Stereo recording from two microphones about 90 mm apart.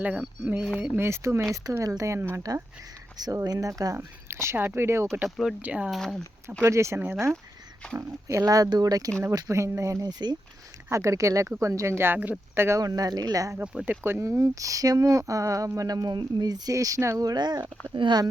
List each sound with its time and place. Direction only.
0.9 s speech: 30° right (ahead or behind)
5.6 s speech: 15° right (ahead or behind)
5.9 s speech: centre (ahead or behind)
6.6 s speech: 30° right (ahead or behind); by 10.3 s 50° right (ahead or behind)
10.8 s speech: 35° right (ahead or behind)
12.8 s speech: 45° right (ahead or behind)
13.8 s speech: 25° right (ahead or behind); by 18.2 s 60° right (ahead or behind)